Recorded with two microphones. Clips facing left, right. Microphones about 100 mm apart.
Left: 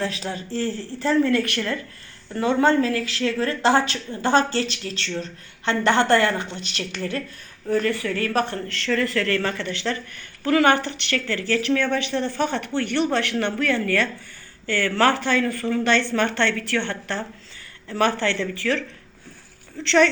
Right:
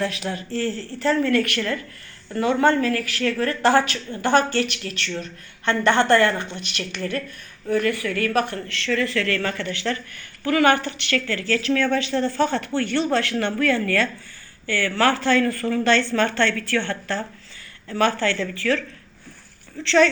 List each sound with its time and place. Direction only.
0.0 s speech: 30° left (ahead or behind)